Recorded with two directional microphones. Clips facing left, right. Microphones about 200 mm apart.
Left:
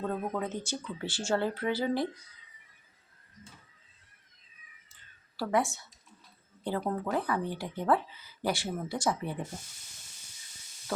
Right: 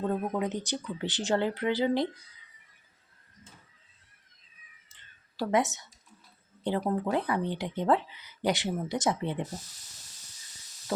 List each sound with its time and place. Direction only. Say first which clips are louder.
0.2 s speech: right 3 dB; 15° right (ahead or behind)
5.4 s speech: right 2 dB; 20° right (ahead or behind)